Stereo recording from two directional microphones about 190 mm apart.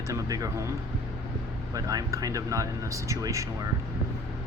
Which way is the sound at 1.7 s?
20° right (ahead or behind).